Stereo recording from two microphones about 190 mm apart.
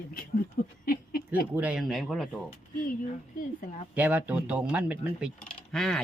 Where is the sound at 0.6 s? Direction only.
50° left (ahead or behind).